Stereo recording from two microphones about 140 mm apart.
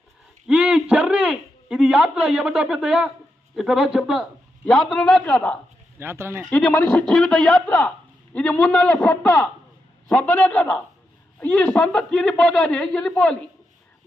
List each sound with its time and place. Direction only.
0.4 s a man's voice: 10° right (ahead or behind); by 5.5 s 10° left (ahead or behind)
6.0 s speech: 15° right (ahead or behind)
6.4 s a man's voice: 10° left (ahead or behind)